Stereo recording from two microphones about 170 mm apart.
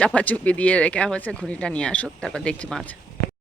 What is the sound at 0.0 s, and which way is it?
Speech, 5° left (ahead or behind).